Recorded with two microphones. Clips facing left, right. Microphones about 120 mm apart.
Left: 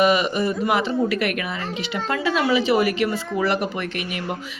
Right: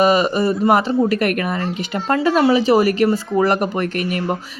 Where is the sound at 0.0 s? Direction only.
40° right (ahead or behind).